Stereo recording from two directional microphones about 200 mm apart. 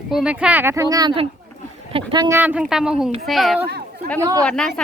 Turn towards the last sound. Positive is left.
turn(degrees=5)  # may be behind; listen again after turning